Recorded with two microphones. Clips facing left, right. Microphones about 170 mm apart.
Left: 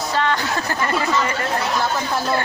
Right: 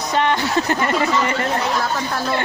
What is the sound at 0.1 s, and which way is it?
Speech, 20° right (ahead or behind).